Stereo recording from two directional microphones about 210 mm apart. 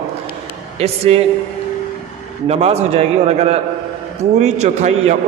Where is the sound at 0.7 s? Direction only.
30° right (ahead or behind).